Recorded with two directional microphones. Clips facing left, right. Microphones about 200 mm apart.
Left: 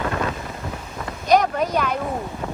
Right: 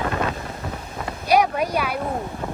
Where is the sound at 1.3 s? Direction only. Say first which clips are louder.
Left 1 dB; 10° right (ahead or behind).